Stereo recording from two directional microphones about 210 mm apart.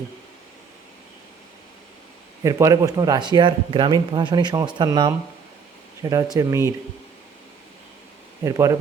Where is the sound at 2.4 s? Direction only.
15° right (ahead or behind).